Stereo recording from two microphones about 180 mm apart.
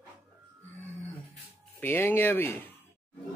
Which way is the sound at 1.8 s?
10° left (ahead or behind).